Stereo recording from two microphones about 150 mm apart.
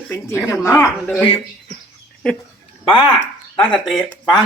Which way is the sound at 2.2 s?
5° left (ahead or behind).